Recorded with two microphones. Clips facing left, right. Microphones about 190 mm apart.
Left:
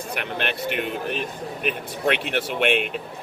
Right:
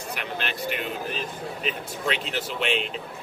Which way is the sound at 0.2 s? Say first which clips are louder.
Left 5 dB; 55° left (ahead or behind).